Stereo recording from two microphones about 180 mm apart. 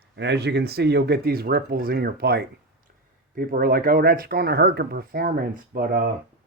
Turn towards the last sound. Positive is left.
turn(degrees=-55)  # may be behind; listen again after turning